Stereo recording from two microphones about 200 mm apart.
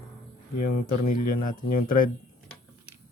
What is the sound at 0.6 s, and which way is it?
Speech, 45° left (ahead or behind).